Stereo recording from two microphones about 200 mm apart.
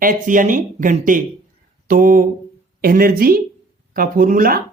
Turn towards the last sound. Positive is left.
turn(degrees=-45)  # may be behind; listen again after turning